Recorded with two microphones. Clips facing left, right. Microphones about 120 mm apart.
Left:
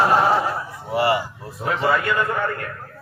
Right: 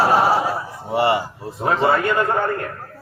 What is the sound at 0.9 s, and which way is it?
A man's voice, 25° right (ahead or behind).